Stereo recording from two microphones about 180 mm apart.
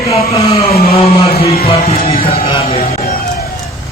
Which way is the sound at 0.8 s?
35° left (ahead or behind).